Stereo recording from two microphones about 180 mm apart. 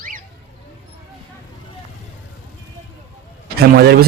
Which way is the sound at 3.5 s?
60° right (ahead or behind).